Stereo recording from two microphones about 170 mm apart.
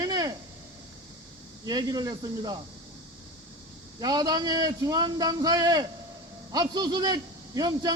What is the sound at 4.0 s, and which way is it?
A man's voice, 25° right (ahead or behind).